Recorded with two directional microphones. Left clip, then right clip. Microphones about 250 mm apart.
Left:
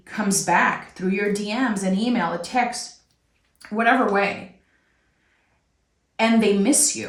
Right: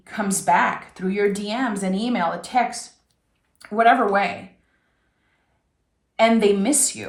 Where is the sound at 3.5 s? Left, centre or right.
Centre.